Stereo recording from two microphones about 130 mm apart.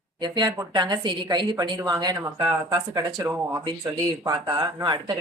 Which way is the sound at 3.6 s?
35° right (ahead or behind).